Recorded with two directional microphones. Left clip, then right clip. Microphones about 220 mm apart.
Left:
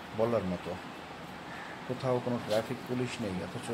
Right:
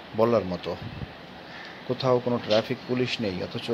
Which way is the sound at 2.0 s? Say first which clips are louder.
Right 8 dB; 20° right (ahead or behind).